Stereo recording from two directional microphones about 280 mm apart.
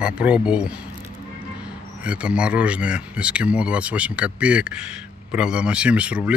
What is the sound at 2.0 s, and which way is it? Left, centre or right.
Speech, centre.